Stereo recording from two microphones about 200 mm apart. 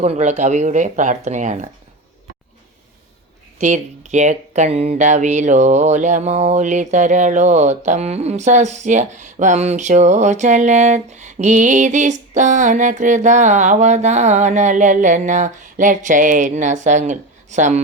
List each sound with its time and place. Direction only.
0.0 s speech: 35° right (ahead or behind)
3.6 s speech: 35° right (ahead or behind)